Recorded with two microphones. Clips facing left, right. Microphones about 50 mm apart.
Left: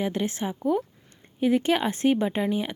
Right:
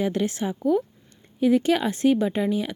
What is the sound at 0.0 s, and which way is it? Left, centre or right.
Speech, left.